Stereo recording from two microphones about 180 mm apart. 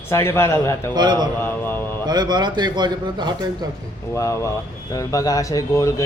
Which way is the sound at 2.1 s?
25° right (ahead or behind).